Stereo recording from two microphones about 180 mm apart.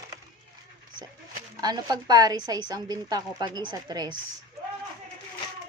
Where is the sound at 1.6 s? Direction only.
20° right (ahead or behind).